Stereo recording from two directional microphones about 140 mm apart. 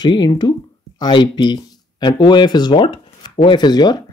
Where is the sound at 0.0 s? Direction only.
30° left (ahead or behind).